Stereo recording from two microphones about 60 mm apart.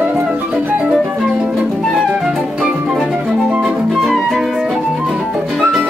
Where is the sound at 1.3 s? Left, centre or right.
Centre.